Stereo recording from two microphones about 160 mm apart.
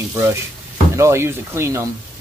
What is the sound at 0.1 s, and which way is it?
Speech, 15° right (ahead or behind).